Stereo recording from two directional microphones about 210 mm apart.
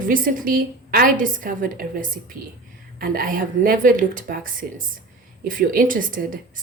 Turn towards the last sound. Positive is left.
turn(degrees=-40)  # may be behind; listen again after turning